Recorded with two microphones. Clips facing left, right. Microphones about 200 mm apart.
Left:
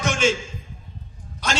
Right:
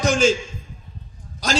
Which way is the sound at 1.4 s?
35° right (ahead or behind).